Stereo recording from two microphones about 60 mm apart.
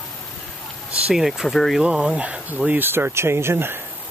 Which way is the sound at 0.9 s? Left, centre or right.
Centre.